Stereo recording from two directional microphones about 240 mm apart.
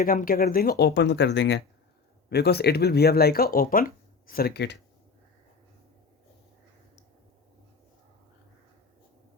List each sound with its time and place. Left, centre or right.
0.0 s speech: left